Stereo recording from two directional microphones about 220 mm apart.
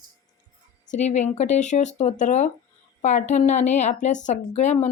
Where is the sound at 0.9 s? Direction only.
30° left (ahead or behind).